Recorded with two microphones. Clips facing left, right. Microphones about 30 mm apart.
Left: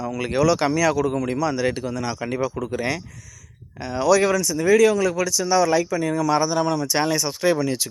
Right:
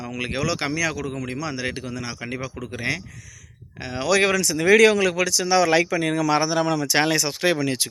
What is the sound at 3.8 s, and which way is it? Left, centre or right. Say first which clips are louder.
Speech: left 2 dB; right.